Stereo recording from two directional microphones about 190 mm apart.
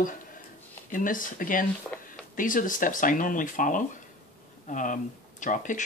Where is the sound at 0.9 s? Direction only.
45° left (ahead or behind).